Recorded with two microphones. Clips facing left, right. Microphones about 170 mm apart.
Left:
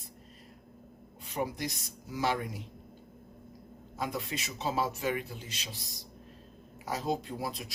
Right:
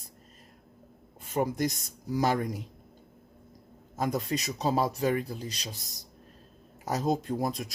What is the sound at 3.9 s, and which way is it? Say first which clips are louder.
Speech: right 6 dB; 45° right (ahead or behind).